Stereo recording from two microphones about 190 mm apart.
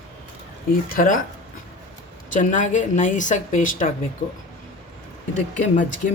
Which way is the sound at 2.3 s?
40° left (ahead or behind).